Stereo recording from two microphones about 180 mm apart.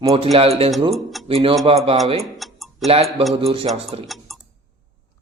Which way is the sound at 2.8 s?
35° right (ahead or behind).